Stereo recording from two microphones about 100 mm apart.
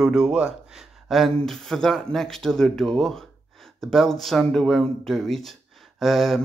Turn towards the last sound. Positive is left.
turn(degrees=0)  # may be behind; listen again after turning